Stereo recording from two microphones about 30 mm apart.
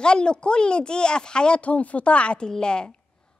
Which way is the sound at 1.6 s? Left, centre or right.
Left.